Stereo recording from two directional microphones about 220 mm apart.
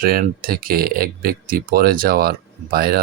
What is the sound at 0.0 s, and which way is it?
Speech, 40° right (ahead or behind).